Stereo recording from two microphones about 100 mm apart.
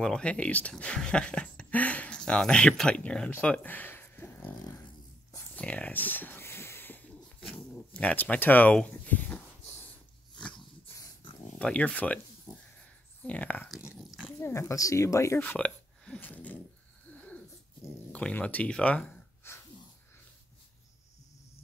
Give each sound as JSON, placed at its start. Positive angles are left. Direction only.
{"t": 0.0, "sound": "speech", "side_deg": 10}
{"t": 5.6, "sound": "a sound", "side_deg": 15}
{"t": 7.3, "sound": "dog", "side_deg": 10}
{"t": 9.6, "sound": "wheeze", "side_deg": 90}
{"t": 10.3, "sound": "dog", "side_deg": 10}
{"t": 11.5, "sound": "speech", "side_deg": 10}
{"t": 12.5, "sound": "a sound", "side_deg": 40}
{"t": 13.3, "sound": "speech", "side_deg": 15}
{"t": 13.7, "sound": "dog", "side_deg": -5}
{"t": 14.2, "sound": "speech", "side_deg": 25}
{"t": 15.4, "sound": "a sound", "side_deg": 15}
{"t": 18.1, "sound": "speech", "side_deg": 10}
{"t": 19.4, "sound": "a sound", "side_deg": 25}